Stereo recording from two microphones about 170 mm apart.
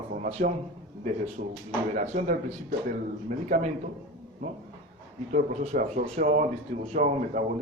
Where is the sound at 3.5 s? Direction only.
45° right (ahead or behind).